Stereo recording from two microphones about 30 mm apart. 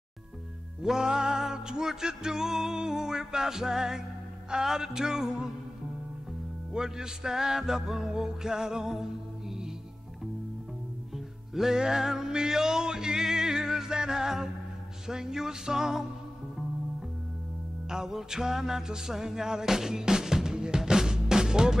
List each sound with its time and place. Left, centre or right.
0.8 s music: right
6.7 s music: right
11.5 s music: centre
17.8 s music: centre